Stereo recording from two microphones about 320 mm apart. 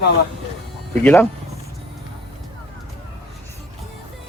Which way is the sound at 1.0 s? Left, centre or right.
Centre.